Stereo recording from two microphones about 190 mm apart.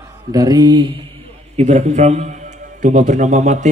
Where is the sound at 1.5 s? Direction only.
35° right (ahead or behind).